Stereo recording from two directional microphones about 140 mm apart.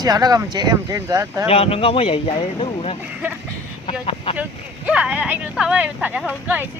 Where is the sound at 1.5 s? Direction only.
40° left (ahead or behind).